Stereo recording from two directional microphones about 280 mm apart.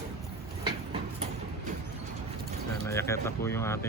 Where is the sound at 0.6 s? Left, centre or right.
Centre.